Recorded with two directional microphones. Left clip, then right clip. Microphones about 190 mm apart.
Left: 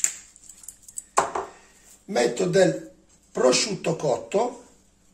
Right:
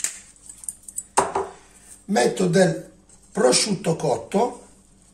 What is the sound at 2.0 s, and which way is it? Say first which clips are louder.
Speech: right 3 dB; 30° left (ahead or behind).